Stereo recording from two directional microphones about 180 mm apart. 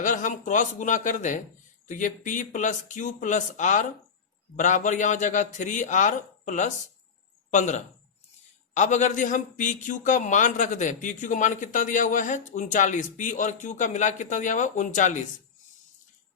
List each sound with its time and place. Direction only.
0.0 s a man's voice: 45° left (ahead or behind)